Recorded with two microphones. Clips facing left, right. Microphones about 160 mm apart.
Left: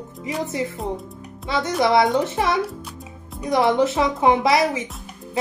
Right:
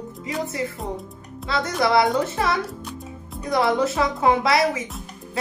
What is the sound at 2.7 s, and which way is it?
Music, centre (ahead or behind).